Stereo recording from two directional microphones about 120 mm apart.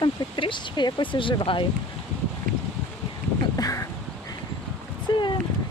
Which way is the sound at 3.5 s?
30° left (ahead or behind).